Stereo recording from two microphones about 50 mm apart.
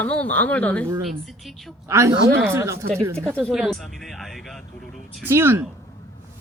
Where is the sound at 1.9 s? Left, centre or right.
Right.